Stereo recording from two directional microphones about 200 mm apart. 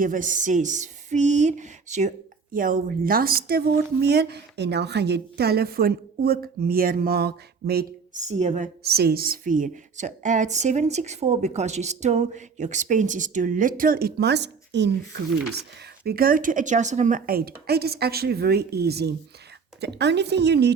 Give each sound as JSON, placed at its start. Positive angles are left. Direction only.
{"t": 0.0, "sound": "a woman's voice", "side_deg": -40}
{"t": 8.1, "sound": "a woman's voice", "side_deg": -35}
{"t": 16.0, "sound": "a woman's voice", "side_deg": -45}